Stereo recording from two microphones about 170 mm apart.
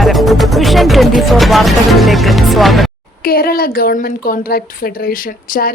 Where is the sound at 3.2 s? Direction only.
60° left (ahead or behind).